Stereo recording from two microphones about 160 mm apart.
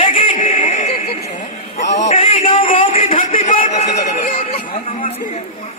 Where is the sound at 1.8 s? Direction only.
90° left.